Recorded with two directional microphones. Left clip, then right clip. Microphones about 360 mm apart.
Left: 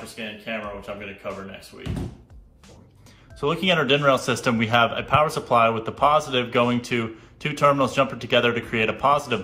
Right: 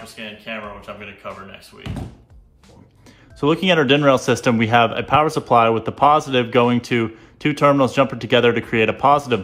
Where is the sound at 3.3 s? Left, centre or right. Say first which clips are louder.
Right 5 dB; right.